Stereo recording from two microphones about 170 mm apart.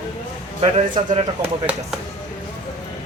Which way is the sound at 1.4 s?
10° right (ahead or behind).